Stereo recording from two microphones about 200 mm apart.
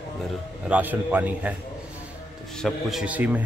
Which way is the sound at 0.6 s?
5° right (ahead or behind).